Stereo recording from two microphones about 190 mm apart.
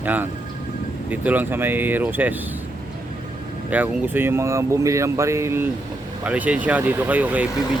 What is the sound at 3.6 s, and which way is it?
Speech, 10° right (ahead or behind).